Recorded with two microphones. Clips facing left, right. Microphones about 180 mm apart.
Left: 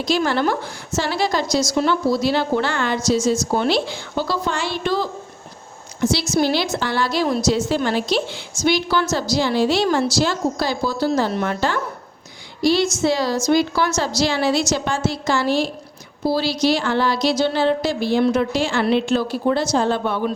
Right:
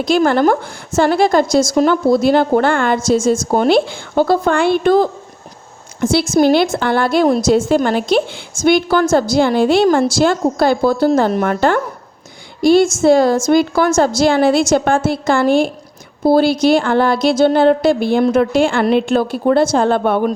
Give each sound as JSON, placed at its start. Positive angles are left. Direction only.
{"t": 0.0, "sound": "a woman's voice", "side_deg": -50}